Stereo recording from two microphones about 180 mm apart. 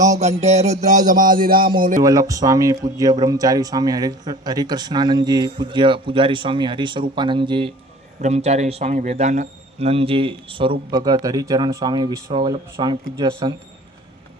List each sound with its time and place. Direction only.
0.2 s music: 40° right (ahead or behind)
2.0 s speech: 20° right (ahead or behind)
8.2 s speech: 40° right (ahead or behind)